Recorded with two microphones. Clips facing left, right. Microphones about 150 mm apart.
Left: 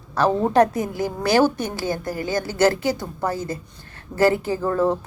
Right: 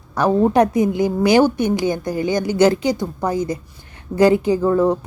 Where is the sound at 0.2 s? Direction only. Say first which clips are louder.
Right 3 dB; 10° right (ahead or behind).